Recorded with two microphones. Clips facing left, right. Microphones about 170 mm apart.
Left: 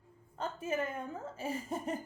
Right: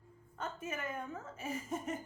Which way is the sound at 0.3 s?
30° left (ahead or behind).